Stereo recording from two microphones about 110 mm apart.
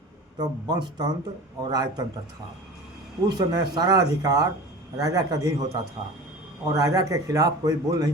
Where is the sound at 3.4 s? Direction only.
40° right (ahead or behind).